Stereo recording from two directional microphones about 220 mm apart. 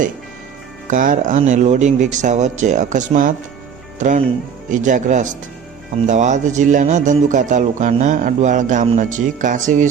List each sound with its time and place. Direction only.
0.9 s speech: 35° right (ahead or behind)
4.7 s speech: 35° right (ahead or behind)